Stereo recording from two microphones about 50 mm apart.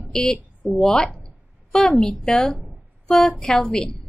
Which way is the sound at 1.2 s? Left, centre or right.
Centre.